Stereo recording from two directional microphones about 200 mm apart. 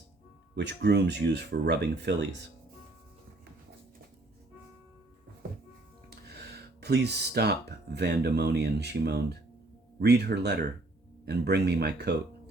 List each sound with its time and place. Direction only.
0.5 s speech: 60° right (ahead or behind)
6.1 s speech: 55° right (ahead or behind)